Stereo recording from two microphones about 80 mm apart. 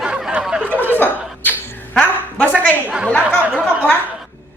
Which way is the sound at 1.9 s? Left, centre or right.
Centre.